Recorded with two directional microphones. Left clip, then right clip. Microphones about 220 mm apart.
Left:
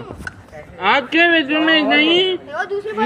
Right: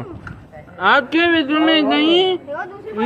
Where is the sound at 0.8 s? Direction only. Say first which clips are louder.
Even; 10° right (ahead or behind).